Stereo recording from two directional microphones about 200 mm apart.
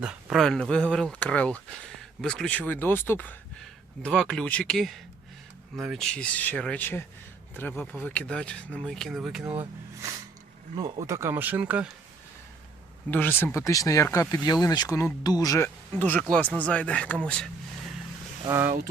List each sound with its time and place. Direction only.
0.0 s speech: 5° right (ahead or behind)
9.4 s speech: 10° right (ahead or behind)
13.1 s speech: 10° left (ahead or behind)
18.4 s speech: 15° right (ahead or behind)